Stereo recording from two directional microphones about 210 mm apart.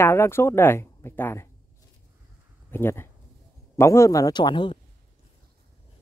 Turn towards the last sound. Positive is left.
turn(degrees=20)  # may be behind; listen again after turning